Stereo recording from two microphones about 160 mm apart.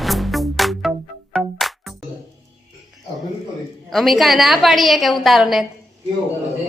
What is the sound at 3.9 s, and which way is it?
A woman's voice, centre (ahead or behind).